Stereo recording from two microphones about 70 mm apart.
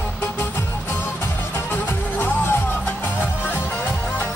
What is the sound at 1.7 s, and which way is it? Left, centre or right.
Music, left.